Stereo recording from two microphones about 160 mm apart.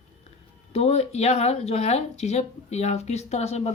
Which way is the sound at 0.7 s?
45° left (ahead or behind).